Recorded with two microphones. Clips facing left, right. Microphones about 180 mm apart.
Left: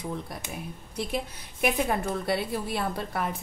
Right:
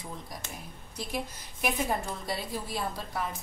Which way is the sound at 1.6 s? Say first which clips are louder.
Left 4 dB; 65° left (ahead or behind).